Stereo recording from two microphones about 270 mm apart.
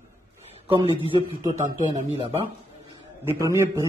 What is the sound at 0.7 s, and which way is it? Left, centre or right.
A man's voice, centre.